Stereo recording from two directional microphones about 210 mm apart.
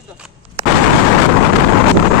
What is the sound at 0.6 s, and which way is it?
Explosion, 25° right (ahead or behind).